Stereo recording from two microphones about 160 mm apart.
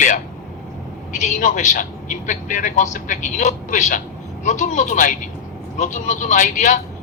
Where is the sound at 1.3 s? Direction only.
50° left (ahead or behind).